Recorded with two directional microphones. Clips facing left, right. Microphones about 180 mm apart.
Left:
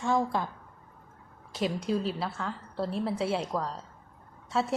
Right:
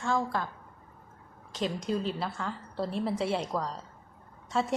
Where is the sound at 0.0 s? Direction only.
20° left (ahead or behind).